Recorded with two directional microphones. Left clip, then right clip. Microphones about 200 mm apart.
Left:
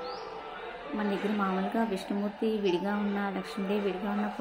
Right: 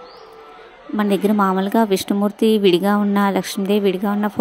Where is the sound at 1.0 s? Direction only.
50° right (ahead or behind).